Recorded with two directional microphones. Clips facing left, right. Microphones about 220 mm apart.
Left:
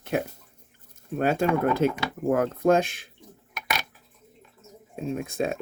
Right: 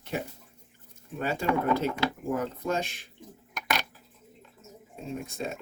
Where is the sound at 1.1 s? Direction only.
55° left (ahead or behind).